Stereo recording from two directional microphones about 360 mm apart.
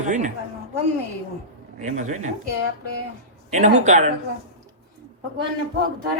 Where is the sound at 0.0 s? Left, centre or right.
Centre.